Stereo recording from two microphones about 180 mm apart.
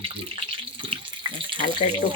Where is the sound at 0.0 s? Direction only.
30° right (ahead or behind).